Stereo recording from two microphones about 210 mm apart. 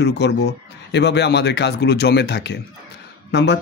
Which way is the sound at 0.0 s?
55° left (ahead or behind).